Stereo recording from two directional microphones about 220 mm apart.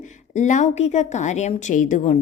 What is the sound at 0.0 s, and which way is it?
A woman's voice, 35° left (ahead or behind).